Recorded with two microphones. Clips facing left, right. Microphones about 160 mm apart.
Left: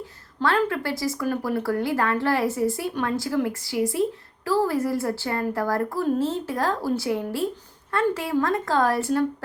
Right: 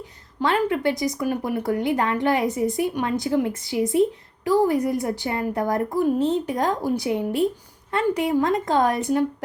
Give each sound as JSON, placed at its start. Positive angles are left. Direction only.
{"t": 0.0, "sound": "a woman's voice", "side_deg": -15}